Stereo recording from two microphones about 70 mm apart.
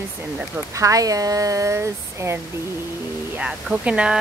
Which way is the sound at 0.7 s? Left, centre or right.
Right.